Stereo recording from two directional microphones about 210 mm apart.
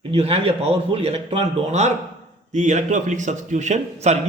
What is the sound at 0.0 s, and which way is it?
Speech, 30° right (ahead or behind).